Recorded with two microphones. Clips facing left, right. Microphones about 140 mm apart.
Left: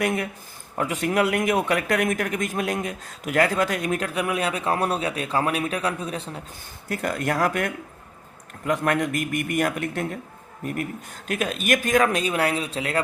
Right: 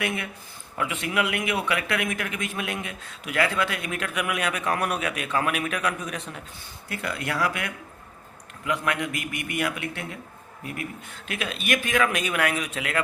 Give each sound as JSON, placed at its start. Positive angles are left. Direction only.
{"t": 0.0, "sound": "speech", "side_deg": 40}
{"t": 6.8, "sound": "a man's voice", "side_deg": 45}